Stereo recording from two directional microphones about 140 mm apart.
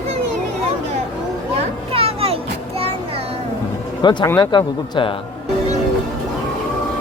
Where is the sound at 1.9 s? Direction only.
45° right (ahead or behind).